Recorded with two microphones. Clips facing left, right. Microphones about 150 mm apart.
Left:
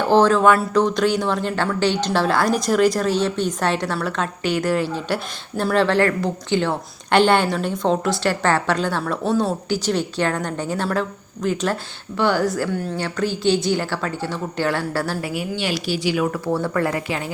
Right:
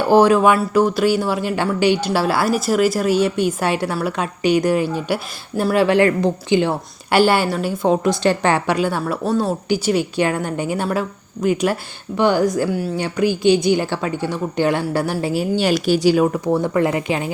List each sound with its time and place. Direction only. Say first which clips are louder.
0.0 s speech: right 2 dB; 10° right (ahead or behind)
9.6 s speech: right 3 dB; 10° right (ahead or behind)
15.2 s a woman's voice: right 6 dB; 35° right (ahead or behind)
16.2 s speech: right 4 dB; 20° right (ahead or behind)